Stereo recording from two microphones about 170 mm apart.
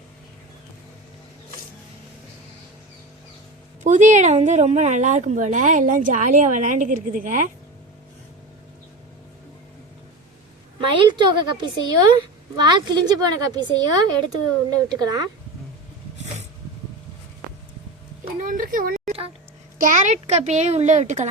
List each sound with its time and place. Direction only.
3.8 s speech: 45° right (ahead or behind)
10.8 s a woman's voice: 30° right (ahead or behind)
14.8 s a woman's voice: 25° right (ahead or behind)
18.3 s speech: 50° right (ahead or behind)